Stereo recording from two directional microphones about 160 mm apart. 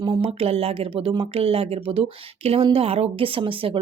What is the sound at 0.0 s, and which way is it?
Speech, 35° right (ahead or behind).